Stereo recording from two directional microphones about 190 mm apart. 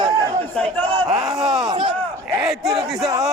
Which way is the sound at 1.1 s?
Centre (ahead or behind).